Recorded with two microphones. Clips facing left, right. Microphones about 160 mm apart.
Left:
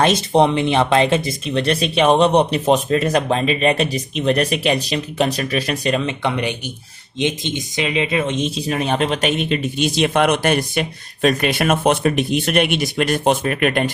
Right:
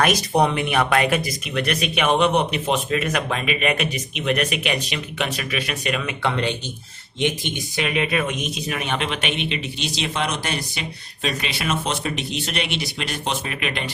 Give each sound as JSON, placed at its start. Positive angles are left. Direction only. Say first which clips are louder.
{"t": 0.0, "sound": "speech", "louder": "left 4 dB", "side_deg": 25}